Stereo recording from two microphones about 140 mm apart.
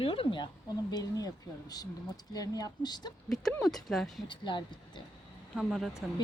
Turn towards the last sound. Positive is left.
turn(degrees=0)  # may be behind; listen again after turning